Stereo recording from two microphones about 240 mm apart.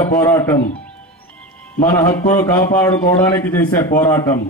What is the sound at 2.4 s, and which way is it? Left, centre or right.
A man's voice, centre.